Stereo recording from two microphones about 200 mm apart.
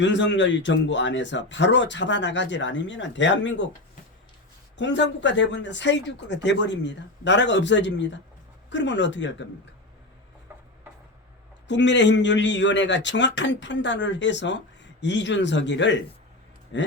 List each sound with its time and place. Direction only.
0.0 s speech: 65° left (ahead or behind)
4.8 s speech: 65° left (ahead or behind)
10.5 s a sound: 10° right (ahead or behind)
11.7 s speech: 65° left (ahead or behind)